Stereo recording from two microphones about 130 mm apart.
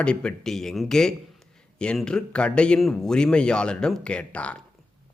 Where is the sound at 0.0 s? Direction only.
10° left (ahead or behind).